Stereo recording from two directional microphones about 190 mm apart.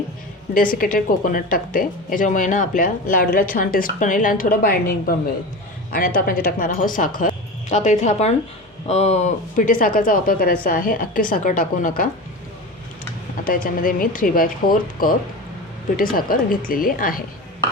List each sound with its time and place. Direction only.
0.5 s speech: 45° left (ahead or behind)
6.1 s speech: 50° left (ahead or behind)
13.7 s speech: 50° left (ahead or behind)